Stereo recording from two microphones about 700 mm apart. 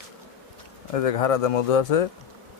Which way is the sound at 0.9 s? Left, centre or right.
Left.